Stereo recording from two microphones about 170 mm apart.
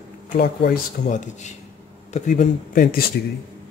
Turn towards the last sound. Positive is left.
turn(degrees=60)  # may be behind; listen again after turning